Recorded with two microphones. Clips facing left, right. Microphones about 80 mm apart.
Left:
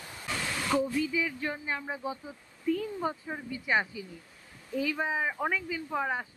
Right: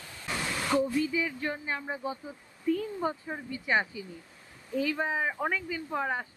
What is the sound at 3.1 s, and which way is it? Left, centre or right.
Speech, centre.